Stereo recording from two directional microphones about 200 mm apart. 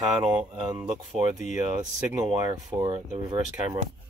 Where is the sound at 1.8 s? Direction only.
20° right (ahead or behind).